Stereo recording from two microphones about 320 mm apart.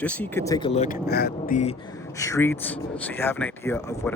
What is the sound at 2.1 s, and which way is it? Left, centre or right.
Speech, centre.